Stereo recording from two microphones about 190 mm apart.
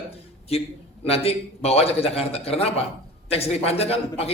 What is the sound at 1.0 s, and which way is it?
Speech, 30° left (ahead or behind).